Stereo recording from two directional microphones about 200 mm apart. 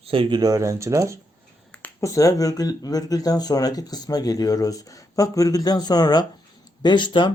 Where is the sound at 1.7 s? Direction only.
10° left (ahead or behind).